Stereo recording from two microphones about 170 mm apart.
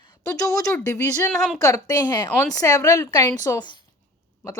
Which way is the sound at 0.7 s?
15° left (ahead or behind).